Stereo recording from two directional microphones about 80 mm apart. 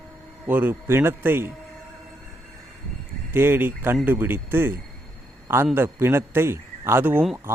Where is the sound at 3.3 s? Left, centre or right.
Right.